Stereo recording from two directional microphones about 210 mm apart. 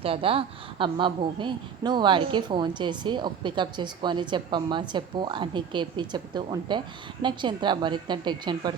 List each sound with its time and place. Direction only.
0.0 s a woman's voice: 25° right (ahead or behind)